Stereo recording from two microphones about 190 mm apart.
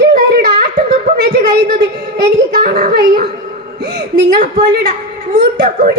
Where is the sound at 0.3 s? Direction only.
50° right (ahead or behind).